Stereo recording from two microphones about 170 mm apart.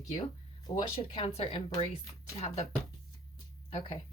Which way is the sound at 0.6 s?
30° left (ahead or behind).